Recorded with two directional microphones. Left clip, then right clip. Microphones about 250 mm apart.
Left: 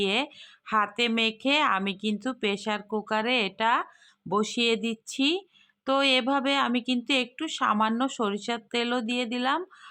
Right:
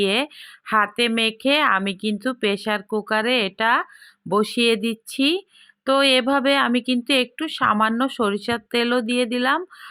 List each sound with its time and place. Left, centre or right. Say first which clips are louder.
0.0 s speech: right 6 dB; centre